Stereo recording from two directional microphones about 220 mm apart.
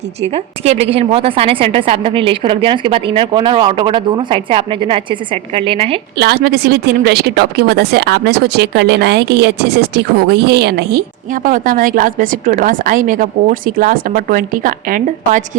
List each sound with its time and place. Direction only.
0.6 s a woman's voice: 30° right (ahead or behind)
6.1 s a woman's voice: 45° right (ahead or behind)